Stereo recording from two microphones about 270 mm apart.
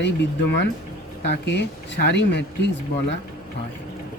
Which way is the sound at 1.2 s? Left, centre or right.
Left.